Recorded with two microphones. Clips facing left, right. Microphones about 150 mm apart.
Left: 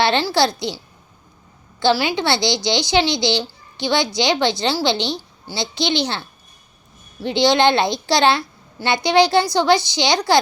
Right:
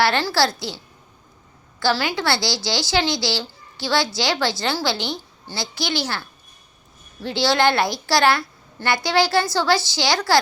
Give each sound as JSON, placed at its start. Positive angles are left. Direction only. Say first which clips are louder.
{"t": 0.0, "sound": "a woman's voice", "louder": "left 2 dB", "side_deg": 15}
{"t": 1.8, "sound": "a woman's voice", "louder": "left 4 dB", "side_deg": 20}